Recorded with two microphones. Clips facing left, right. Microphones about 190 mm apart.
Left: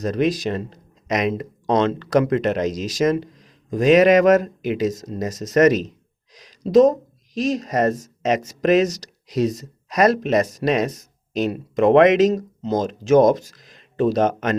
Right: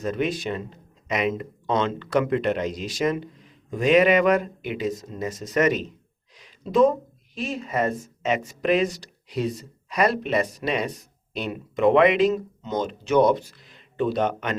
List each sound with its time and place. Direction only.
0.0 s speech: 40° left (ahead or behind)